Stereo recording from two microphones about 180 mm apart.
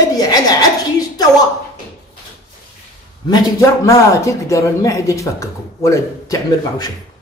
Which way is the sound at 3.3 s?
20° left (ahead or behind).